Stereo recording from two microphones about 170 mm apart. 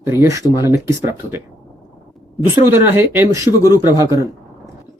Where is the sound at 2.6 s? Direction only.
15° right (ahead or behind).